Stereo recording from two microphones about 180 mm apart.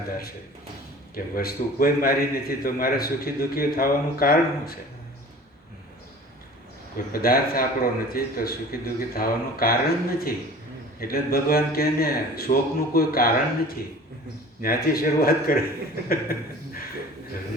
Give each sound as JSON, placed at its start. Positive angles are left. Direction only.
{"t": 1.1, "sound": "a man's voice", "side_deg": 55}
{"t": 6.9, "sound": "a man's voice", "side_deg": 55}
{"t": 16.0, "sound": "chuckle", "side_deg": 55}